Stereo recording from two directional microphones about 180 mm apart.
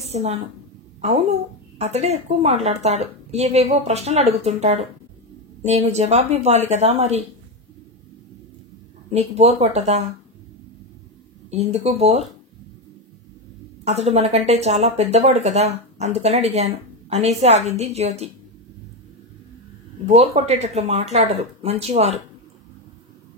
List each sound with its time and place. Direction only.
0.0 s a woman's voice: 35° right (ahead or behind)
1.8 s speech: 35° right (ahead or behind)
9.1 s speech: 35° right (ahead or behind)
11.5 s speech: 35° right (ahead or behind)
13.8 s speech: 35° right (ahead or behind)
20.1 s speech: 35° right (ahead or behind)